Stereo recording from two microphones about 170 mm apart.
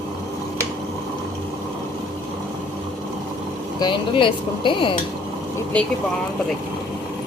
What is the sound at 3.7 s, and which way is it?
Speech, 30° left (ahead or behind).